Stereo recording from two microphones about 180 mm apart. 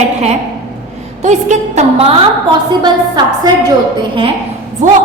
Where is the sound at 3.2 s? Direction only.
25° right (ahead or behind).